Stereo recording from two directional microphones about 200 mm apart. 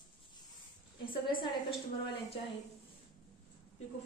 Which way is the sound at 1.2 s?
25° left (ahead or behind).